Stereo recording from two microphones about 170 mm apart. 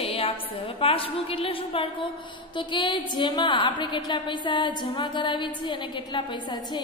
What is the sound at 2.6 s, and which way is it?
A woman's voice, 25° left (ahead or behind).